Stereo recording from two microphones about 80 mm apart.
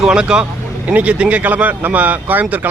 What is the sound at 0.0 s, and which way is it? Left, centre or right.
Speech, centre.